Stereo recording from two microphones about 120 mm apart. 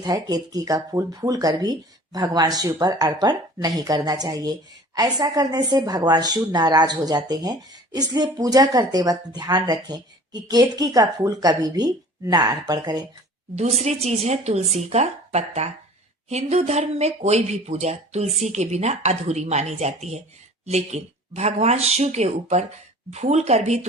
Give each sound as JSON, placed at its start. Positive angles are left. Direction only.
{"t": 0.0, "sound": "speech", "side_deg": -30}
{"t": 13.6, "sound": "speech", "side_deg": -65}